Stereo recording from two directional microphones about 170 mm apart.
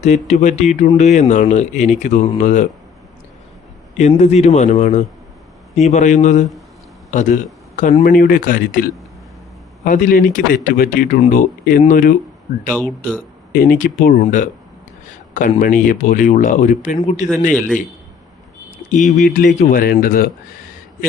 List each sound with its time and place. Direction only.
0.0 s speech: 40° left (ahead or behind)
3.9 s a man's voice: 40° left (ahead or behind)
13.5 s speech: 55° left (ahead or behind)
19.1 s speech: 50° left (ahead or behind)
19.8 s speech: 60° left (ahead or behind)